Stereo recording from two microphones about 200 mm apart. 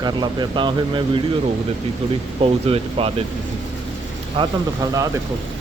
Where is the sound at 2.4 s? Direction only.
30° right (ahead or behind).